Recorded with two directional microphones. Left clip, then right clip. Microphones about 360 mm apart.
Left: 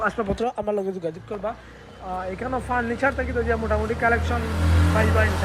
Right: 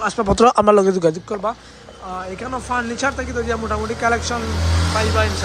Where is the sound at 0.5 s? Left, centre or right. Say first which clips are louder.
Right 12 dB; right.